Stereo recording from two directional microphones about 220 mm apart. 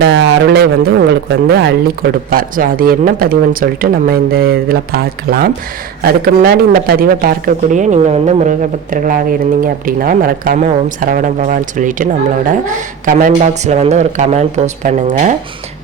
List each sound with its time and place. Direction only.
0.0 s speech: 55° right (ahead or behind); by 15.4 s 35° right (ahead or behind)